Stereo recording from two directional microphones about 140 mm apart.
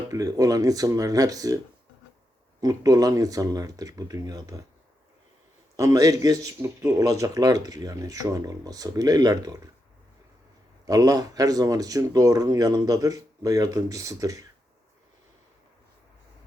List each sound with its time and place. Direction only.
0.1 s speech: 25° right (ahead or behind)
2.6 s speech: 25° right (ahead or behind)
5.7 s speech: 25° right (ahead or behind)
10.8 s speech: 25° right (ahead or behind)